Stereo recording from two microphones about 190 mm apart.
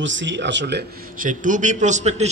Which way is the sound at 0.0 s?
75° right (ahead or behind).